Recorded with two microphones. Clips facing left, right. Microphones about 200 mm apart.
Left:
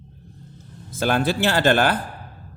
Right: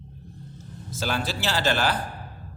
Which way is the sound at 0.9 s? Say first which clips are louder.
Left 8 dB; 55° left (ahead or behind).